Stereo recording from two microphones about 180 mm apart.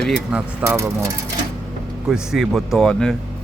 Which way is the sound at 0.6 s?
15° right (ahead or behind).